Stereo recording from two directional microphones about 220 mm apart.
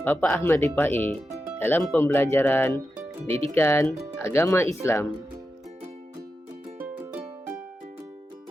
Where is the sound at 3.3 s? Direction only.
25° right (ahead or behind).